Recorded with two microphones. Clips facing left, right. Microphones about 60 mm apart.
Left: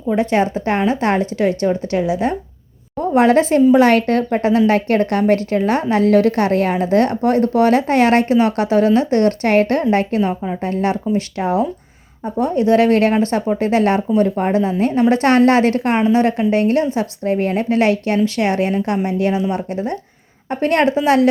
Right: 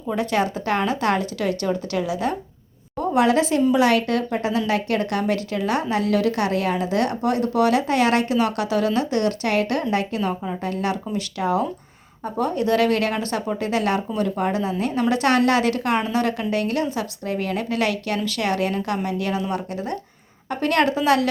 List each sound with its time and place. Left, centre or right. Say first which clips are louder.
0.1 s a woman's voice: left 6 dB; left
3.2 s a woman's voice: left 6 dB; left